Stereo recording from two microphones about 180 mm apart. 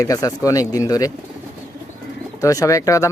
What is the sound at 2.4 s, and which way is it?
Speech, 20° left (ahead or behind).